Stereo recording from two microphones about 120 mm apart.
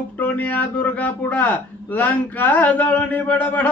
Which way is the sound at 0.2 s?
15° left (ahead or behind).